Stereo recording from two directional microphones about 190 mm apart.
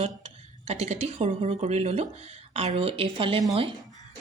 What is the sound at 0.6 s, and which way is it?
Speech, 35° right (ahead or behind).